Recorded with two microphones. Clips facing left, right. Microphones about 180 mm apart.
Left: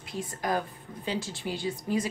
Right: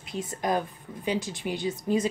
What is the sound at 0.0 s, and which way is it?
A woman's voice, 20° right (ahead or behind).